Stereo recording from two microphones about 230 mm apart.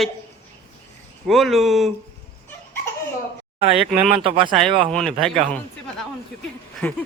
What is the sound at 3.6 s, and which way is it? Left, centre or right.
Speech, right.